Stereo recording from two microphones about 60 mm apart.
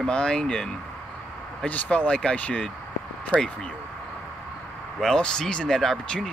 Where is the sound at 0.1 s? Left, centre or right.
Centre.